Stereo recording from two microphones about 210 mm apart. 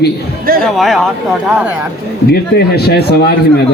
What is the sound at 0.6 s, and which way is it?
Speech, centre (ahead or behind).